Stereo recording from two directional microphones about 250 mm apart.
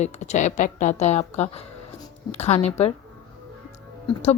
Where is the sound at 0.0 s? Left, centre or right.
Left.